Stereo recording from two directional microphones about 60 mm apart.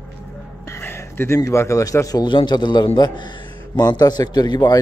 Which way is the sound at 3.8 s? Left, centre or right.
Left.